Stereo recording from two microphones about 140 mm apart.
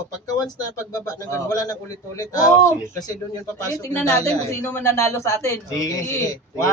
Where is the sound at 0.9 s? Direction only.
25° left (ahead or behind).